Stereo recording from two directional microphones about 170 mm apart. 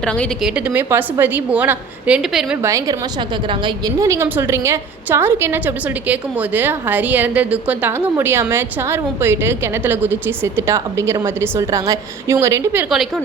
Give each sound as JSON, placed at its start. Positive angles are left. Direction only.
{"t": 0.0, "sound": "speech", "side_deg": 5}
{"t": 0.5, "sound": "a woman's voice", "side_deg": -10}
{"t": 2.6, "sound": "a woman's voice", "side_deg": -20}
{"t": 12.9, "sound": "speech", "side_deg": 0}